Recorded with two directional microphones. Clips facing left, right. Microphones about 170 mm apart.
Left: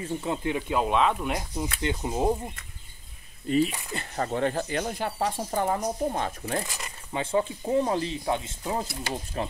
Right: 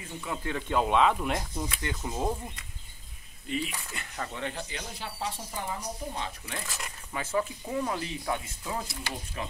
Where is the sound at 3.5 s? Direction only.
40° left (ahead or behind).